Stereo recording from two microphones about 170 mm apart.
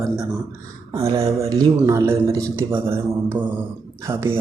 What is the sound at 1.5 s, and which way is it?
Speech, 20° right (ahead or behind).